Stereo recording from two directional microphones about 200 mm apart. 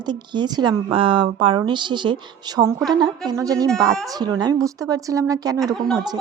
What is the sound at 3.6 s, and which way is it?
Speech, centre (ahead or behind).